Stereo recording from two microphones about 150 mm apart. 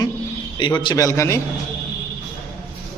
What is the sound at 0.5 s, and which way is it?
Speech, 30° left (ahead or behind).